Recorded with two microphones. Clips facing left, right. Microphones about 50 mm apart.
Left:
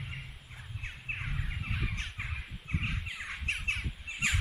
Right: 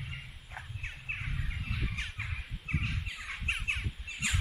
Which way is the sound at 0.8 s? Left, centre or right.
Centre.